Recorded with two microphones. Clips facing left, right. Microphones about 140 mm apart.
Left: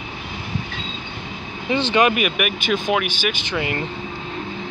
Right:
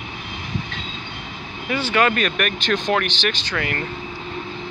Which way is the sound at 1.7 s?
20° left (ahead or behind).